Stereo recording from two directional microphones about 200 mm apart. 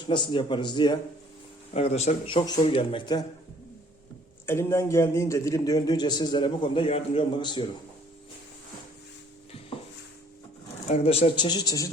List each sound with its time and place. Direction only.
0.1 s a man's voice: 25° left (ahead or behind)
1.7 s a man's voice: 30° left (ahead or behind)
4.4 s a man's voice: 15° left (ahead or behind)
10.8 s a man's voice: 30° left (ahead or behind)